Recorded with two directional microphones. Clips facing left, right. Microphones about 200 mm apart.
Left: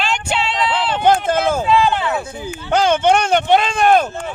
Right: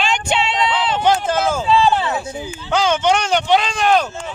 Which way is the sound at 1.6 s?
30° right (ahead or behind).